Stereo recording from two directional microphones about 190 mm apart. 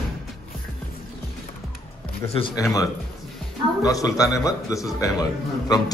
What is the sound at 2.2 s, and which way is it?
Speech, 30° left (ahead or behind).